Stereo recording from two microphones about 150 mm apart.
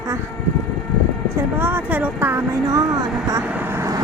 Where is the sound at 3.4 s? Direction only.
10° right (ahead or behind).